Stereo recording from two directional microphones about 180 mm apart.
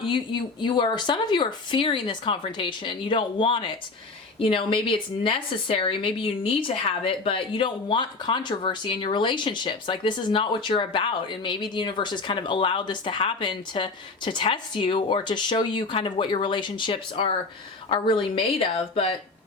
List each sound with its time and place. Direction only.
0.0 s speech: 25° left (ahead or behind)